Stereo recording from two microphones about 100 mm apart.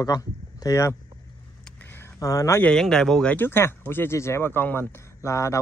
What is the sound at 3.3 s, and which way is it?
Speech, 20° left (ahead or behind).